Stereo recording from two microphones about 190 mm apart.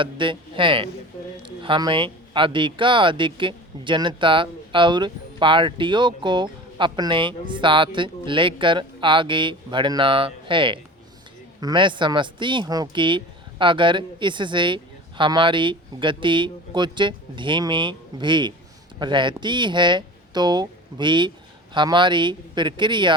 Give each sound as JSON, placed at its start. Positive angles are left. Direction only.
{"t": 0.0, "sound": "speech", "side_deg": -25}